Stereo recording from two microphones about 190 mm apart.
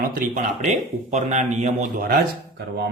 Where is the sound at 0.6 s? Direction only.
40° right (ahead or behind).